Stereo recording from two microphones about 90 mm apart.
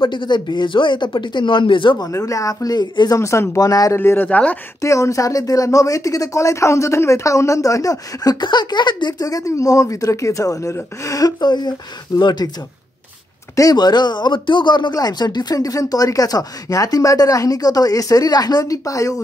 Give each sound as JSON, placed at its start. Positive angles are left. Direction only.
{"t": 0.0, "sound": "speech", "side_deg": 60}
{"t": 2.0, "sound": "speech", "side_deg": 40}
{"t": 3.2, "sound": "speech", "side_deg": 35}
{"t": 4.0, "sound": "speech", "side_deg": 25}
{"t": 4.8, "sound": "speech", "side_deg": 35}
{"t": 9.3, "sound": "speech", "side_deg": 35}
{"t": 13.6, "sound": "speech", "side_deg": 45}